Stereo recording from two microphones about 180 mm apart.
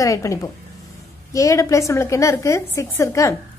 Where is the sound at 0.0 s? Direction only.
20° left (ahead or behind).